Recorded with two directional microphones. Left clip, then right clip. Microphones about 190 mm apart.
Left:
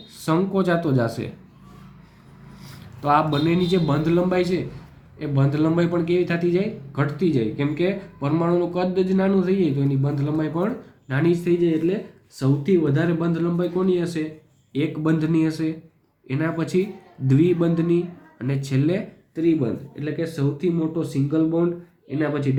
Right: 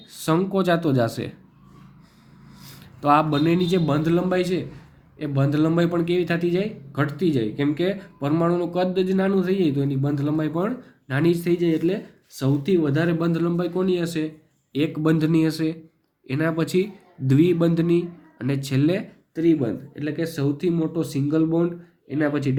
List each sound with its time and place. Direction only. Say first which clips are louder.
0.1 s speech: even; 35° right (ahead or behind)
2.6 s a man's voice: right 2 dB; 35° right (ahead or behind); by 22.5 s 50° right (ahead or behind)